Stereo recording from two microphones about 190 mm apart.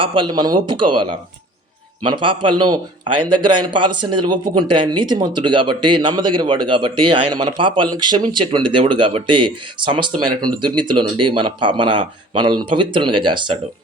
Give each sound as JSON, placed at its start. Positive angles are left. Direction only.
{"t": 0.0, "sound": "a man's voice", "side_deg": -25}
{"t": 2.0, "sound": "a man's voice", "side_deg": -25}